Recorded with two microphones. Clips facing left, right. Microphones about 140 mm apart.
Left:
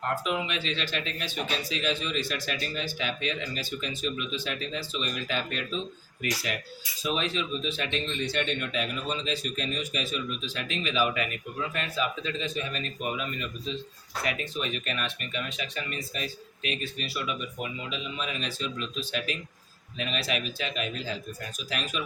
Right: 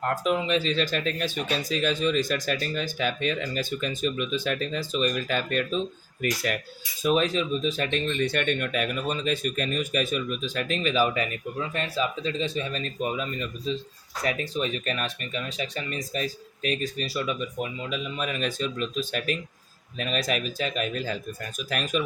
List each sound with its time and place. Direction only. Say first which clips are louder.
0.3 s speech: right 6 dB; 35° right (ahead or behind)